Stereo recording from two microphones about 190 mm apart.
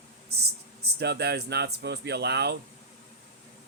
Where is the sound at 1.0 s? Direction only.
60° right (ahead or behind).